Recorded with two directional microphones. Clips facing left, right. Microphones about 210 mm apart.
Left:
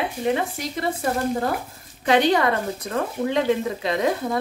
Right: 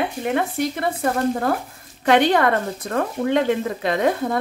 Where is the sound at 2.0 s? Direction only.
55° right (ahead or behind).